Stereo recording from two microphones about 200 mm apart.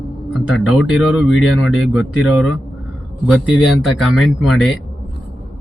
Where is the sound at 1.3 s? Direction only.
75° left (ahead or behind).